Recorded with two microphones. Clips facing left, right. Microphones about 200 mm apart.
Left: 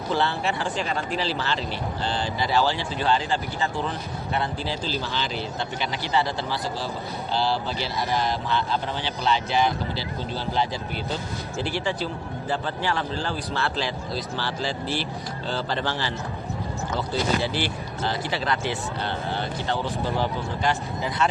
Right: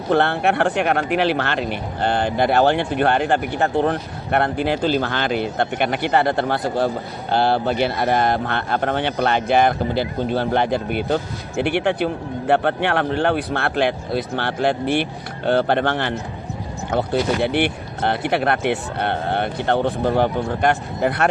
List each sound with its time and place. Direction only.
0.1 s speech: 60° right (ahead or behind)